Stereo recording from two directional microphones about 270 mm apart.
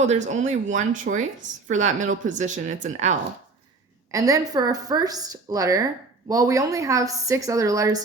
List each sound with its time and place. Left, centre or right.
0.0 s a woman's voice: right
4.1 s a woman's voice: centre